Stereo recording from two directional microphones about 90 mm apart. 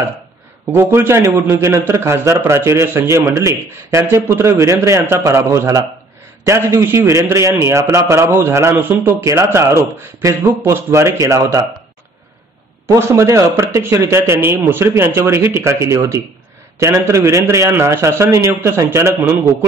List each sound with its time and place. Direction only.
0.7 s a man's voice: 25° right (ahead or behind)
12.8 s a man's voice: 35° right (ahead or behind)